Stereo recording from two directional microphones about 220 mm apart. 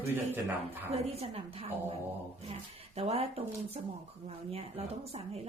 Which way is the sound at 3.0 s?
25° right (ahead or behind).